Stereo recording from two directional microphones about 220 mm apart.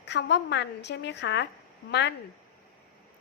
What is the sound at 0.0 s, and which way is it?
A woman's voice, 50° left (ahead or behind).